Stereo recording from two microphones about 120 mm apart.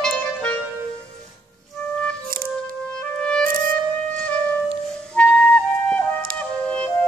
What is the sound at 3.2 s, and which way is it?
Music, 10° left (ahead or behind).